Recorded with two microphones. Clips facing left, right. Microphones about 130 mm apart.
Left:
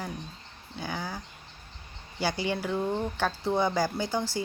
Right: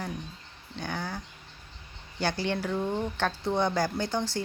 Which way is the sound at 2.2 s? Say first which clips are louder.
Even; 10° left (ahead or behind).